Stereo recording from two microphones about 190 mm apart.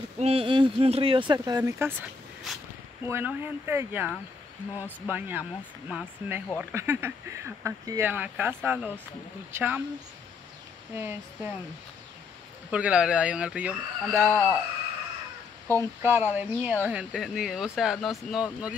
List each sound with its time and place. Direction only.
0.2 s speech: 30° right (ahead or behind); by 9.8 s 10° right (ahead or behind)
11.0 s speech: 10° right (ahead or behind)
12.7 s speech: 5° right (ahead or behind)
14.2 s speech: 5° left (ahead or behind)
15.7 s speech: 15° right (ahead or behind)